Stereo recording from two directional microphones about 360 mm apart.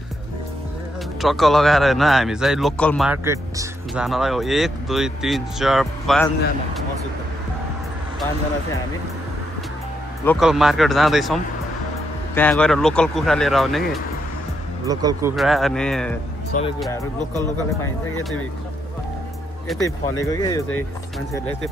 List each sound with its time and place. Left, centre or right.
1.2 s speech: centre
10.2 s speech: centre
12.4 s speech: centre
14.9 s speech: centre
16.5 s speech: left
19.7 s speech: centre